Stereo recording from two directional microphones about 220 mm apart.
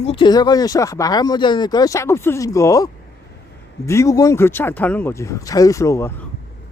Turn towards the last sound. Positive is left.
turn(degrees=15)  # may be behind; listen again after turning